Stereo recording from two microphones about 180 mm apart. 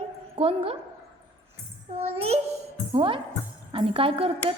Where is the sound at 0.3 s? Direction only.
30° right (ahead or behind).